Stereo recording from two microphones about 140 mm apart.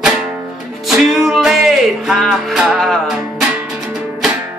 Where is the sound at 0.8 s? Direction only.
Centre (ahead or behind).